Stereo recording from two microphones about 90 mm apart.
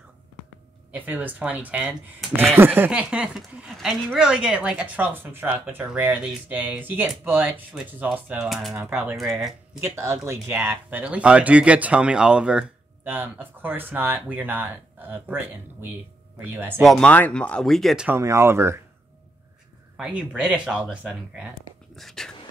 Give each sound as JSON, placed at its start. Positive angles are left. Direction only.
{"t": 0.9, "sound": "speech", "side_deg": -20}
{"t": 2.9, "sound": "speech", "side_deg": -10}
{"t": 9.1, "sound": "speech", "side_deg": 0}
{"t": 9.8, "sound": "speech", "side_deg": -35}
{"t": 13.0, "sound": "speech", "side_deg": -25}
{"t": 16.8, "sound": "speech", "side_deg": 0}
{"t": 17.1, "sound": "speech", "side_deg": 15}
{"t": 18.1, "sound": "speech", "side_deg": -30}
{"t": 20.0, "sound": "speech", "side_deg": -10}
{"t": 21.9, "sound": "speech", "side_deg": 5}